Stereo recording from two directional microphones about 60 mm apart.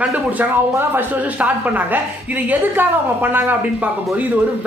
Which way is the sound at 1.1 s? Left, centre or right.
Right.